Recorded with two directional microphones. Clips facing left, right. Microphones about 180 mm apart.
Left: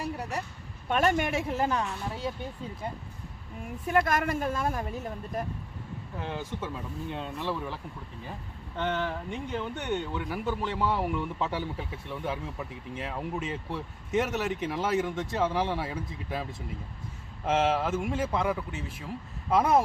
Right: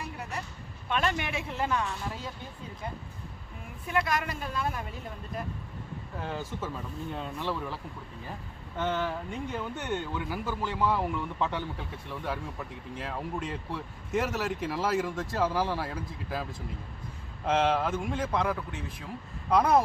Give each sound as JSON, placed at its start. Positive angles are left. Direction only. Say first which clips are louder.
{"t": 0.0, "sound": "a sound", "louder": "left 4 dB", "side_deg": 35}
{"t": 0.9, "sound": "speech", "louder": "left 5 dB", "side_deg": 45}
{"t": 3.8, "sound": "speech", "louder": "left 4 dB", "side_deg": 50}
{"t": 6.7, "sound": "speech", "louder": "left 1 dB", "side_deg": 0}
{"t": 8.7, "sound": "speech", "louder": "even", "side_deg": -5}